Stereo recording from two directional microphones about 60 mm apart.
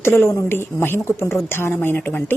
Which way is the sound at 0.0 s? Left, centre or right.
Left.